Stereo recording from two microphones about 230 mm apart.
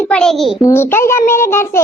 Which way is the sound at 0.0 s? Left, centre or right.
Centre.